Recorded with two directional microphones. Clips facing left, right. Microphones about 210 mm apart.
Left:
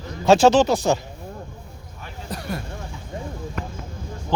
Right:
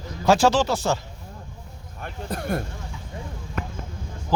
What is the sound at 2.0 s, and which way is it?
Speech, 55° right (ahead or behind).